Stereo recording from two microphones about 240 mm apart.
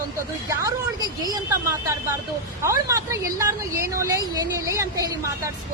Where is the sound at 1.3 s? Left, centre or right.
Centre.